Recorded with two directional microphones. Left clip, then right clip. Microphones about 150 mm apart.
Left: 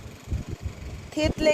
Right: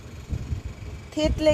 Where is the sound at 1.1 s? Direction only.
Centre (ahead or behind).